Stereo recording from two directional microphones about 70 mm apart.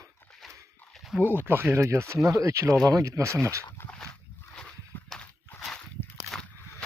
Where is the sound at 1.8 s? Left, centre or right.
Right.